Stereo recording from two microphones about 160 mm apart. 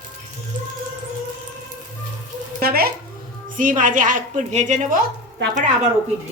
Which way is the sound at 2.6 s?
70° right (ahead or behind).